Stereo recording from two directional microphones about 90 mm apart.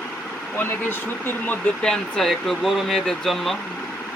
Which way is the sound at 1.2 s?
20° left (ahead or behind).